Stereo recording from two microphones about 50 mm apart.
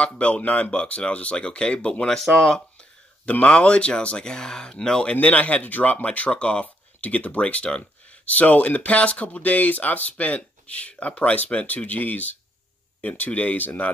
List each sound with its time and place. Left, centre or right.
0.0 s speech: left
2.3 s speech: centre
5.1 s speech: left